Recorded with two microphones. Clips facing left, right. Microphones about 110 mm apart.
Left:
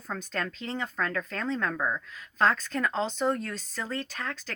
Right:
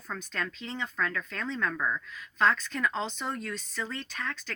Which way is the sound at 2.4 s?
30° left (ahead or behind).